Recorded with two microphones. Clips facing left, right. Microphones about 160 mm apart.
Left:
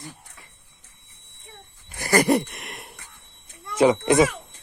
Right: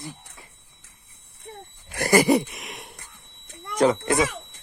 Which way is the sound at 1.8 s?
75° right (ahead or behind).